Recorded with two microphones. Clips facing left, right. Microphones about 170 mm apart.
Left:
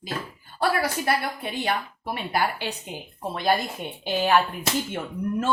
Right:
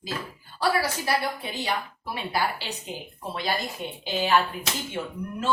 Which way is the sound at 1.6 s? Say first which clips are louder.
Left 3 dB; 55° left (ahead or behind).